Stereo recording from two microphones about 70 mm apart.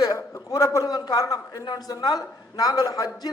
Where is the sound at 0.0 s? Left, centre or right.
Left.